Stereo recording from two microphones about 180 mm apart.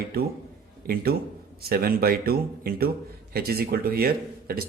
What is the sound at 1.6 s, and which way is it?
A man's voice, 55° right (ahead or behind).